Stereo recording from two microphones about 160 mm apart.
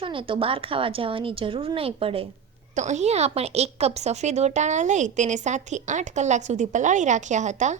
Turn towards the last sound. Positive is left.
turn(degrees=-45)  # may be behind; listen again after turning